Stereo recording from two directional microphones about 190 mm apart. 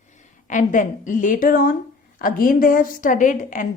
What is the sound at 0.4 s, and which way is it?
A woman's voice, 40° left (ahead or behind).